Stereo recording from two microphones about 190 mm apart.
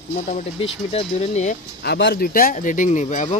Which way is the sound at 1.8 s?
60° left (ahead or behind).